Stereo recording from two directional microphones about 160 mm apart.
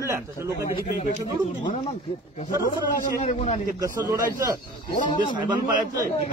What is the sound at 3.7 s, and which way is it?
Speech, 25° right (ahead or behind).